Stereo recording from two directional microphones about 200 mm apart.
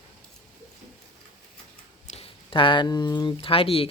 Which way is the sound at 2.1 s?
30° left (ahead or behind).